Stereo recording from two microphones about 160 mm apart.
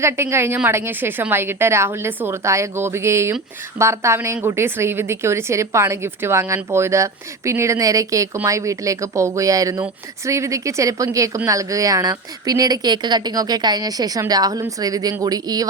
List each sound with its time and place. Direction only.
0.0 s a woman's voice: 15° right (ahead or behind)